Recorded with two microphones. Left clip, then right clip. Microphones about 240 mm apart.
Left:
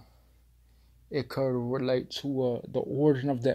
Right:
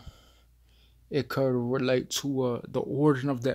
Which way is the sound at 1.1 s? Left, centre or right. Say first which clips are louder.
Right 2 dB; right.